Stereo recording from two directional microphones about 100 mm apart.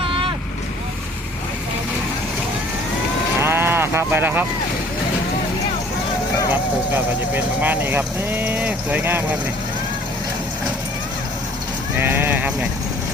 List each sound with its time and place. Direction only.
0.0 s vehicle: 60° right (ahead or behind)
3.4 s a sound: 25° right (ahead or behind)
6.5 s speech: 20° right (ahead or behind)
11.9 s sheep: 20° right (ahead or behind)